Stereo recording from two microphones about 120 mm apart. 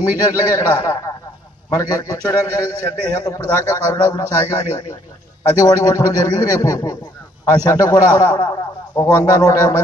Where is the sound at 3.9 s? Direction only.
25° left (ahead or behind).